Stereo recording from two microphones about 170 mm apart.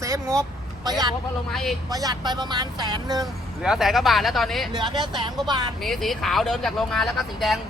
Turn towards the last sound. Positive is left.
turn(degrees=0)  # may be behind; listen again after turning